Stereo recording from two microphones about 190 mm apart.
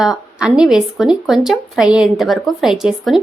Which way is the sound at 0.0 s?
5° right (ahead or behind).